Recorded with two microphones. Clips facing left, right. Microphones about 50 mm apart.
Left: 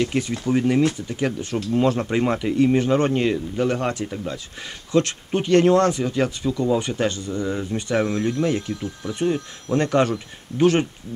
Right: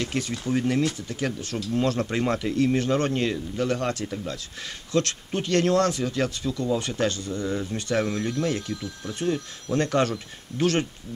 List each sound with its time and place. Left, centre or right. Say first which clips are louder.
0.0 s speech: left 5 dB; centre